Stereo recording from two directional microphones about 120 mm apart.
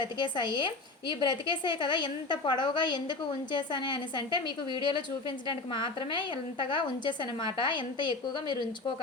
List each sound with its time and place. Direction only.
0.0 s speech: 40° left (ahead or behind)